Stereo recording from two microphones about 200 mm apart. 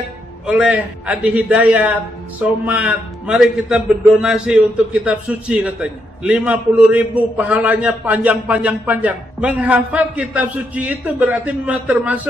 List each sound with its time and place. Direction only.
0.5 s a man's voice: 5° right (ahead or behind)